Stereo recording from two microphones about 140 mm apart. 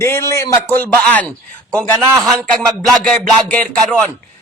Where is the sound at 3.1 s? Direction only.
10° left (ahead or behind).